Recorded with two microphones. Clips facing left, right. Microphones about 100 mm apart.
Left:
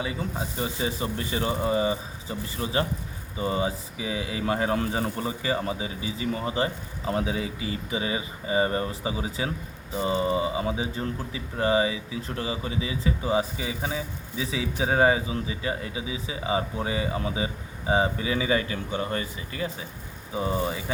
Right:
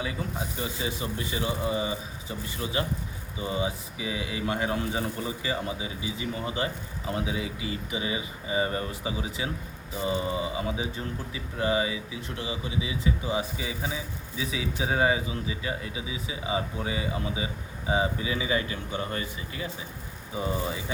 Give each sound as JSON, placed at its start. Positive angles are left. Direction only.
{"t": 0.0, "sound": "speech", "side_deg": 30}